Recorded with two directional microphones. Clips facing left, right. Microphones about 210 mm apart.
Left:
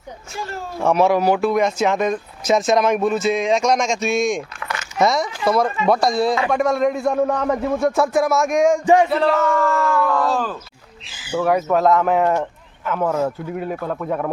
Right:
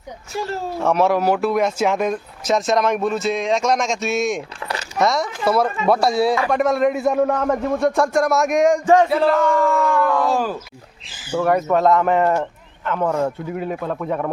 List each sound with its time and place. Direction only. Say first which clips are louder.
0.3 s speech: right 5 dB; 35° right (ahead or behind)
0.8 s speech: left 2 dB; centre (ahead or behind)
4.6 s a sound: right 2 dB; 35° right (ahead or behind)
4.9 s speech: left 1 dB; centre (ahead or behind)
8.8 s a sound: even; 15° left (ahead or behind)
9.0 s speech: right 1 dB; centre (ahead or behind)
10.3 s speech: right 2 dB; 10° right (ahead or behind)
11.3 s speech: even; centre (ahead or behind)